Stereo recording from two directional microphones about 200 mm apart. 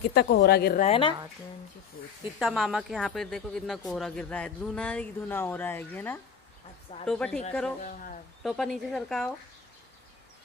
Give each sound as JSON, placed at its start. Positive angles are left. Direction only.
{"t": 0.1, "sound": "speech", "side_deg": 55}
{"t": 0.8, "sound": "a woman's voice", "side_deg": 25}
{"t": 2.3, "sound": "speech", "side_deg": 0}
{"t": 7.8, "sound": "speech", "side_deg": 40}
{"t": 8.4, "sound": "speech", "side_deg": 0}